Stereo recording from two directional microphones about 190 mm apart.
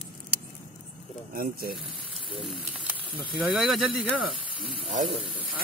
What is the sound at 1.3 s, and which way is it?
Speech, 50° right (ahead or behind).